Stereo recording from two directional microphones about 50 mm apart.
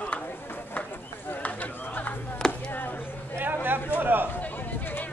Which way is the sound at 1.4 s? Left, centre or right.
Left.